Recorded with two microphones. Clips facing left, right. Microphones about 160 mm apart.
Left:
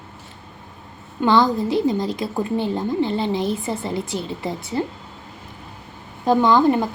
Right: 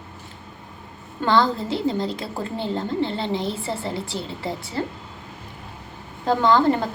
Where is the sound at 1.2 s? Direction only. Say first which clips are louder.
Left 3 dB; 15° left (ahead or behind).